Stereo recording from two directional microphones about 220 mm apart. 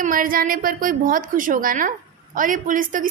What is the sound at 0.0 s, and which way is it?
A woman's voice, 40° right (ahead or behind).